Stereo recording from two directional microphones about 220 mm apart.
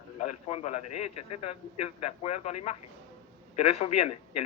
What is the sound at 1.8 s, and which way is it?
Speech, 25° left (ahead or behind).